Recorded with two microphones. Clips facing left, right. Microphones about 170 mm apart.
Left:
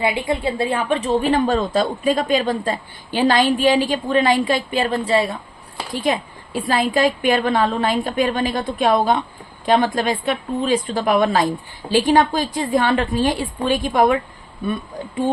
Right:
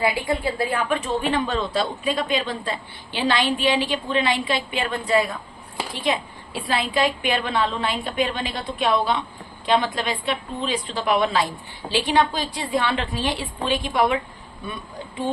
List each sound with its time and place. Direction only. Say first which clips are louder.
0.0 s a woman's voice: left 2 dB; 25° left (ahead or behind)
5.9 s a woman's voice: left 4 dB; 45° left (ahead or behind)